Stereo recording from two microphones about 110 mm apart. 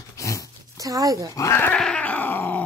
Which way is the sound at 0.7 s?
30° right (ahead or behind).